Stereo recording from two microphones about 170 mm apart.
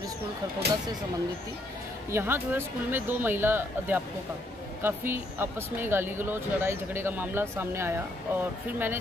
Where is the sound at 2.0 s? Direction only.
15° right (ahead or behind).